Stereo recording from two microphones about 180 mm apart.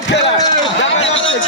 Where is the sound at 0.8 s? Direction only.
90° left.